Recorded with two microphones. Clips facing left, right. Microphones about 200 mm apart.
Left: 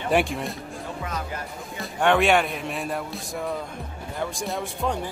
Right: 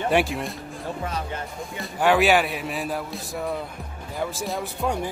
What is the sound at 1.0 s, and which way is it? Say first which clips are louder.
Music: right 1 dB; 30° right (ahead or behind).